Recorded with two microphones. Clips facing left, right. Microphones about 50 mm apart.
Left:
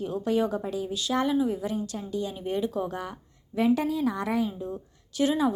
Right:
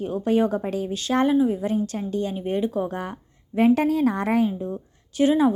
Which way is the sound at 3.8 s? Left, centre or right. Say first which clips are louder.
Right 6 dB; right.